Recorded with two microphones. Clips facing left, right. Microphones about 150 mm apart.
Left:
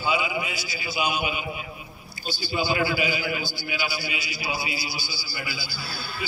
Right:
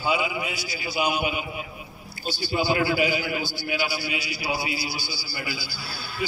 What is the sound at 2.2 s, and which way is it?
A man's voice, 60° right (ahead or behind).